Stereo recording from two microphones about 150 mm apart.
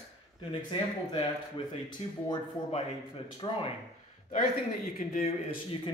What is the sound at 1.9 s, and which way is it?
Speech, 35° left (ahead or behind).